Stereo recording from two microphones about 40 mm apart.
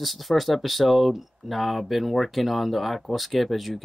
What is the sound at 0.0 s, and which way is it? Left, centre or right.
Speech, centre.